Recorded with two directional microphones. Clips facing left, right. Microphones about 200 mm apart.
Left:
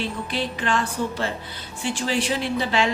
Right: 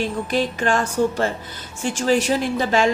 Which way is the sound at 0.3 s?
45° right (ahead or behind).